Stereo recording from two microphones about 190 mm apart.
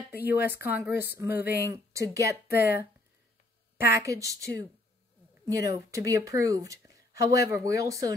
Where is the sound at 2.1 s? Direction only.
15° right (ahead or behind).